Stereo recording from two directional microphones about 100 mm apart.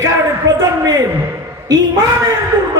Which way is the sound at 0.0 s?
35° right (ahead or behind).